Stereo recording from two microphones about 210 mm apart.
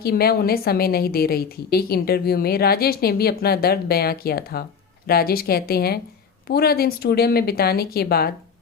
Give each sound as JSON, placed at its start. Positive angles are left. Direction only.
{"t": 0.0, "sound": "a woman's voice", "side_deg": 45}